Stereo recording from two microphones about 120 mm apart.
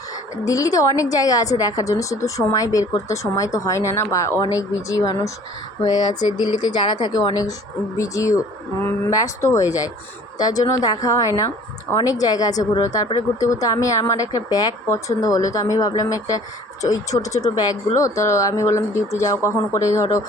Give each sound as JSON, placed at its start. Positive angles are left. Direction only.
{"t": 0.4, "sound": "speech", "side_deg": 30}